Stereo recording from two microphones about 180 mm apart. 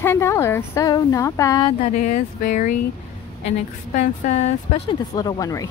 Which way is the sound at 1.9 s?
45° left (ahead or behind).